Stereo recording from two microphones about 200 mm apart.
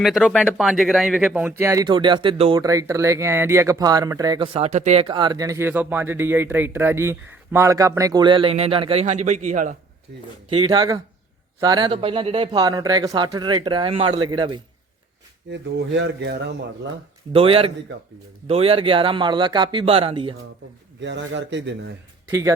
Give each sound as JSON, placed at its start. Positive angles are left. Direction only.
{"t": 0.0, "sound": "speech", "side_deg": 0}
{"t": 10.5, "sound": "speech", "side_deg": -20}
{"t": 15.4, "sound": "speech", "side_deg": -60}
{"t": 17.3, "sound": "speech", "side_deg": -30}
{"t": 21.0, "sound": "speech", "side_deg": -60}
{"t": 22.3, "sound": "speech", "side_deg": -15}